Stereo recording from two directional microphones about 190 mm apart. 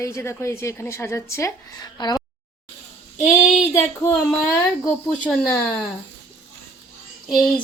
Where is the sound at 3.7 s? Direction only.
15° left (ahead or behind).